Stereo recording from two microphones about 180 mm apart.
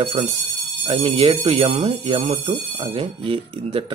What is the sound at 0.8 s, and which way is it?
Speech, 30° right (ahead or behind).